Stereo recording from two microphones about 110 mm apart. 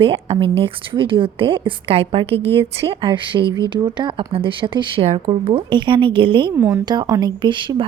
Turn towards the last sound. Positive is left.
turn(degrees=-45)  # may be behind; listen again after turning